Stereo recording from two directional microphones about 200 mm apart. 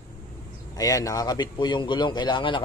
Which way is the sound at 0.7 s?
15° left (ahead or behind).